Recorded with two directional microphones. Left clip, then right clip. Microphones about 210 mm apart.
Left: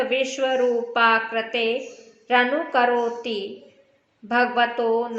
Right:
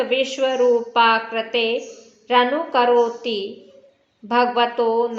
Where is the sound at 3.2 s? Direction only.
45° right (ahead or behind).